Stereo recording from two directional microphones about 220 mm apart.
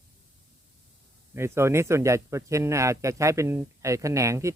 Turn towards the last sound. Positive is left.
turn(degrees=-15)  # may be behind; listen again after turning